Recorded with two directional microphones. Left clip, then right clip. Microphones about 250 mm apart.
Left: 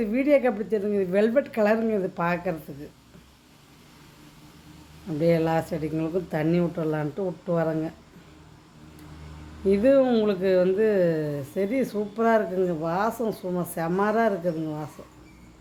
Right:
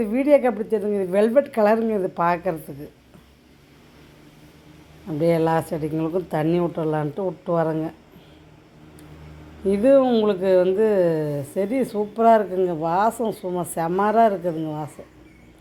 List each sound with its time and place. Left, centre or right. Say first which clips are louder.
0.0 s speech: right 4 dB; centre
5.0 s speech: right 3 dB; centre
9.6 s speech: right 3 dB; centre